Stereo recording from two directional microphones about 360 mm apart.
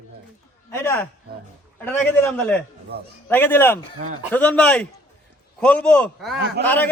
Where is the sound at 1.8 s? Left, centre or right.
Centre.